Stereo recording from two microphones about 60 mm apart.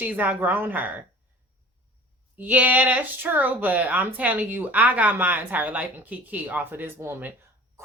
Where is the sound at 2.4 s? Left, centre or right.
Right.